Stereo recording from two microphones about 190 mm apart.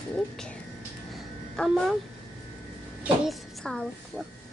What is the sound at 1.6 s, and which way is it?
Speech, 5° left (ahead or behind).